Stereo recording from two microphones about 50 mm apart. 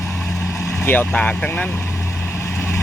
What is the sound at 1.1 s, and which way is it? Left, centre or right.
Speech, left.